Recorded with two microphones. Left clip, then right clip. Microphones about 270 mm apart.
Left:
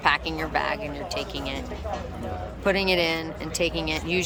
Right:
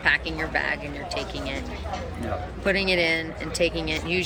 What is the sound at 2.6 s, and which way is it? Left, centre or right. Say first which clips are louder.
Speech: even; centre.